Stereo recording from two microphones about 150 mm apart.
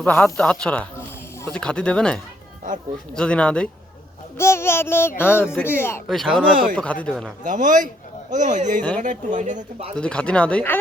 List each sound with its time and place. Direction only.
0.0 s speech: 15° left (ahead or behind)
4.4 s speech: 15° left (ahead or behind)
6.1 s speech: 5° left (ahead or behind)
7.4 s speech: 60° right (ahead or behind)
10.0 s speech: 5° left (ahead or behind)